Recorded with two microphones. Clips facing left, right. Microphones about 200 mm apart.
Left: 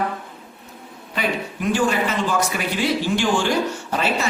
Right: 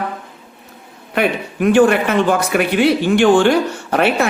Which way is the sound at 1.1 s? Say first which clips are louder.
Right 7 dB; 60° right (ahead or behind).